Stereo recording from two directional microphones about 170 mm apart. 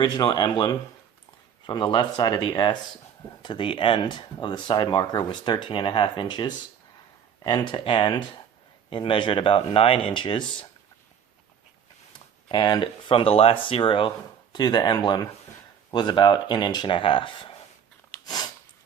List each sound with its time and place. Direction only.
0.0 s speech: 25° left (ahead or behind)
12.5 s speech: 25° left (ahead or behind)